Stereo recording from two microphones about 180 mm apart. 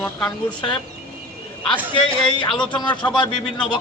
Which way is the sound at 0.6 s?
25° left (ahead or behind).